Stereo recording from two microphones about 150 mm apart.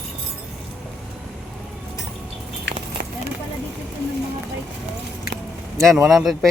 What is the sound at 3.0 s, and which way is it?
Clip-clop, 75° right (ahead or behind).